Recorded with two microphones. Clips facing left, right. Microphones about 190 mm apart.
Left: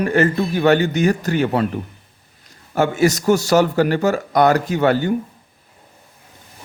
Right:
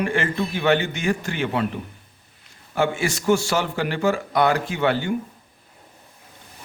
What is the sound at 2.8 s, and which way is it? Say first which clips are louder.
A man's voice: left 6 dB; 40° left (ahead or behind).